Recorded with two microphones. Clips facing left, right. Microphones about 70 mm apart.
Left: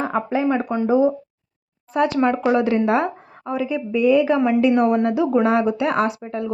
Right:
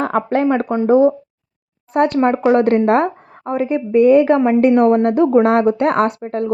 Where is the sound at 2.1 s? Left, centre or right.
Right.